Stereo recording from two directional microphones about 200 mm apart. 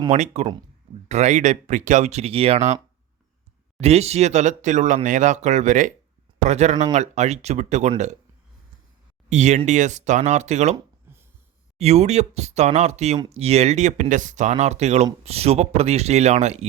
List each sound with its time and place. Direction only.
0.1 s speech: 35° right (ahead or behind)
3.8 s speech: 30° right (ahead or behind)
9.3 s speech: 35° right (ahead or behind)
11.8 s speech: 35° right (ahead or behind)